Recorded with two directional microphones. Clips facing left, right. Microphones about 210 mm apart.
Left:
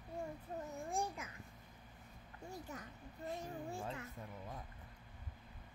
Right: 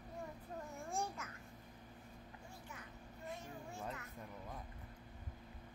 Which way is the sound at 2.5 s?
40° left (ahead or behind).